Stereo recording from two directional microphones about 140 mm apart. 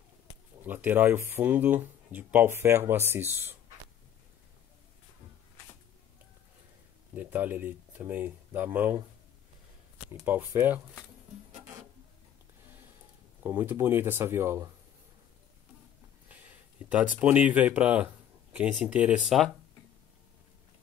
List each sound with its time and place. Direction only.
0.7 s speech: 15° right (ahead or behind)
7.2 s speech: 15° right (ahead or behind)
10.2 s speech: 15° right (ahead or behind)
13.4 s speech: 15° right (ahead or behind)
16.3 s speech: 10° right (ahead or behind)